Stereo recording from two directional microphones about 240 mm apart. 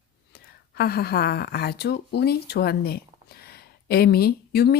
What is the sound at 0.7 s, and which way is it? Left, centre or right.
Speech, left.